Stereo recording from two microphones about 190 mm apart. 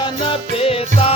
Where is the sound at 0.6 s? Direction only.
30° left (ahead or behind).